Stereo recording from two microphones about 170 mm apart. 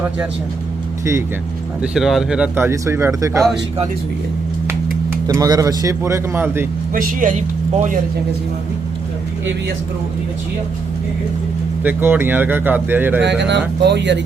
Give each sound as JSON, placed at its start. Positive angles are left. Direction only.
{"t": 1.8, "sound": "speech", "side_deg": 0}
{"t": 5.2, "sound": "speech", "side_deg": -20}
{"t": 6.9, "sound": "speech", "side_deg": -50}
{"t": 11.8, "sound": "speech", "side_deg": -10}
{"t": 13.8, "sound": "speech", "side_deg": -90}